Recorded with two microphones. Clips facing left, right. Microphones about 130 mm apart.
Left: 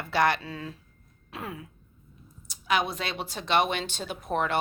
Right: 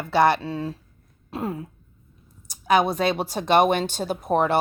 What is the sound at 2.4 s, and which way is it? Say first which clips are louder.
A woman's voice: right 7 dB; 45° right (ahead or behind).